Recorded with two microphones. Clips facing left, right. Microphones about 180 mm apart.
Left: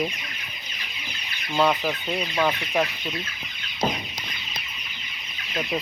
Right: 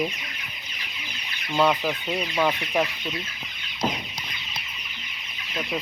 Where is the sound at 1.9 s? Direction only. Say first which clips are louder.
Even; 5° right (ahead or behind).